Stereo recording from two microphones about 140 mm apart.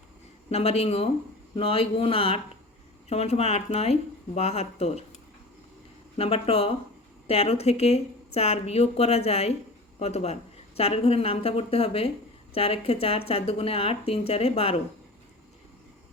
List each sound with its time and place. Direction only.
0.5 s speech: 45° left (ahead or behind)
6.1 s speech: 45° left (ahead or behind)